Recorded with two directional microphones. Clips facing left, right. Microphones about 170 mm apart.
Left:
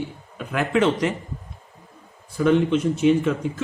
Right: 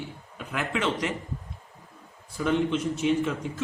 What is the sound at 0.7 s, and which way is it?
Speech, 40° left (ahead or behind).